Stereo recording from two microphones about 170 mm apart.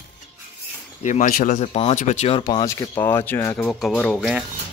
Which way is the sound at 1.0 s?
45° left (ahead or behind).